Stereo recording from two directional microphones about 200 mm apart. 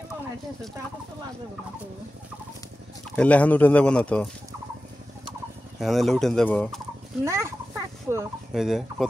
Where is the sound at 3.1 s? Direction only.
5° left (ahead or behind).